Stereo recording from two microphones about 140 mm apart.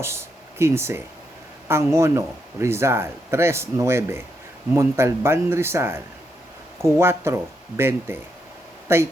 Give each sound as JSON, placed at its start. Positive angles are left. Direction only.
{"t": 0.0, "sound": "a man's voice", "side_deg": -20}
{"t": 7.0, "sound": "speech", "side_deg": -20}